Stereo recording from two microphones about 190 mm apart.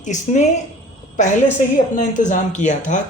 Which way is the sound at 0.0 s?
40° left (ahead or behind).